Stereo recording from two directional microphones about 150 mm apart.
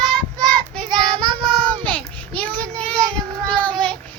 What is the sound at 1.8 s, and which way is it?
Child singing, 10° left (ahead or behind).